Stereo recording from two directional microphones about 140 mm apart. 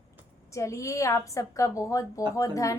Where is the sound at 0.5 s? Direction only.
20° left (ahead or behind).